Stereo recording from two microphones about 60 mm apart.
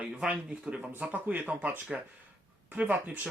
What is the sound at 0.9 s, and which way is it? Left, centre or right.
Speech, right.